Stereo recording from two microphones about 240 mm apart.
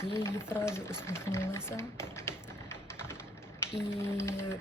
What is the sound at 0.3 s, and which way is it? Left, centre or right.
Speech, centre.